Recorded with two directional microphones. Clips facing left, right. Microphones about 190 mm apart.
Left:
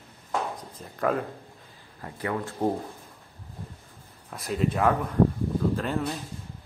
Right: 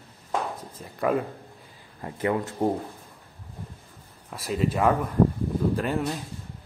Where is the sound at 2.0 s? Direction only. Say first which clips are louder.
Right 4 dB; 20° right (ahead or behind).